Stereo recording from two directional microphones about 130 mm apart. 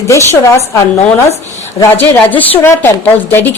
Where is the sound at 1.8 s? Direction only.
15° left (ahead or behind).